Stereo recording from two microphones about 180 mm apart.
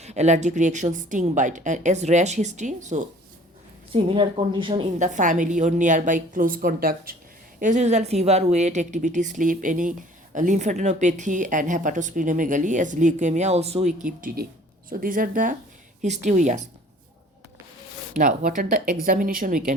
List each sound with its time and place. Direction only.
0.0 s a woman's voice: 40° right (ahead or behind)
3.9 s speech: 30° right (ahead or behind)
4.9 s a woman's voice: 45° right (ahead or behind)
7.6 s a woman's voice: 40° right (ahead or behind)
18.1 s a woman's voice: 45° right (ahead or behind)